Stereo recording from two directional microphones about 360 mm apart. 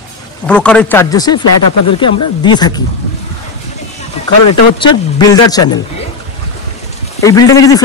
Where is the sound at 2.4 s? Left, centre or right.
Centre.